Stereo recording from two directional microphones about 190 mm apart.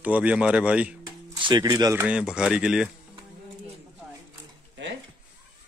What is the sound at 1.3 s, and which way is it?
Speech, 25° right (ahead or behind).